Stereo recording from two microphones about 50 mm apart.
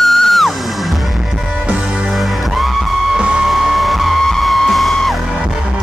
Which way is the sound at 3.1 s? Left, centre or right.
Centre.